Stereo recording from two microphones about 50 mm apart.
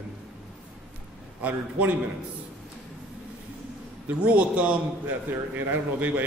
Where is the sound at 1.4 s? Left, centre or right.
Right.